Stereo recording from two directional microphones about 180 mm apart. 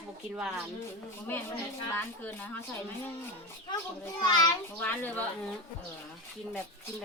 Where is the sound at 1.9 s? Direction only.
10° left (ahead or behind).